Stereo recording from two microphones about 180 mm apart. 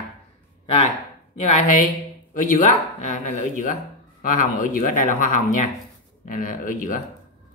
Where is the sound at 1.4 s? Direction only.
45° left (ahead or behind).